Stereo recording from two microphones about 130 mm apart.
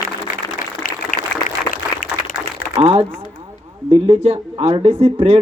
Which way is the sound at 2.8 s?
50° right (ahead or behind).